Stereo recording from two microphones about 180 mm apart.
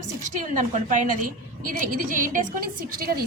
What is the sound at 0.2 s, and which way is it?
A woman's voice, 45° right (ahead or behind).